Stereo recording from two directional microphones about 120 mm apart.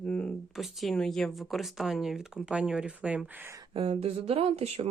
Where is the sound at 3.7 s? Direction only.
55° right (ahead or behind).